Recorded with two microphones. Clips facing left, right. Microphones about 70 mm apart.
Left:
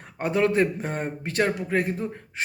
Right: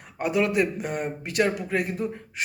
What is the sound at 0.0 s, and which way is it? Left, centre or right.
A man's voice, left.